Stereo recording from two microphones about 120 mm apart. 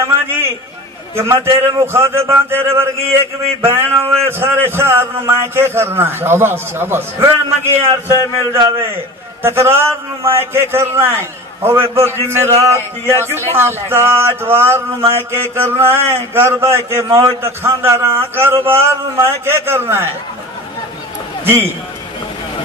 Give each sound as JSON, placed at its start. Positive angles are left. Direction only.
{"t": 0.0, "sound": "a sound", "side_deg": -20}
{"t": 1.1, "sound": "speech", "side_deg": -25}
{"t": 9.4, "sound": "speech", "side_deg": -20}